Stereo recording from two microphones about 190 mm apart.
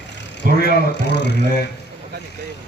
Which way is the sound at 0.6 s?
65° left (ahead or behind).